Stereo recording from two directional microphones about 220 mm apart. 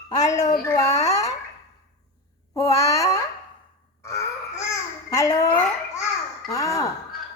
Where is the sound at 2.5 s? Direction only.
15° left (ahead or behind).